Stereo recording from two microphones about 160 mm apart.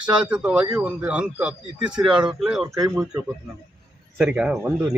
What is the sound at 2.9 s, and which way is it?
A man's voice, 5° right (ahead or behind).